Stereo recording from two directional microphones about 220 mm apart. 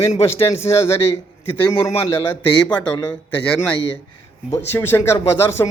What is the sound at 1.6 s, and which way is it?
Speech, 20° left (ahead or behind).